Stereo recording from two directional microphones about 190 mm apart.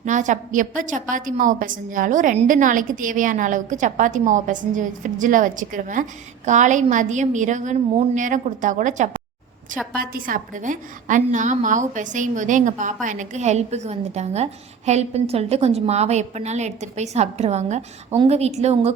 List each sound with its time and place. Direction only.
0.0 s a woman's voice: 40° right (ahead or behind)